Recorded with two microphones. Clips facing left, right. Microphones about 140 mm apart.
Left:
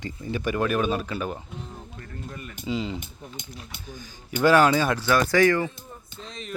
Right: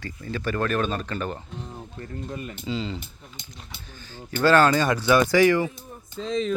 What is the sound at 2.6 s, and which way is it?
Speech, 10° left (ahead or behind).